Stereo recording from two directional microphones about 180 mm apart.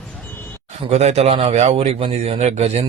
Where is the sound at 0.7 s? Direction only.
35° right (ahead or behind).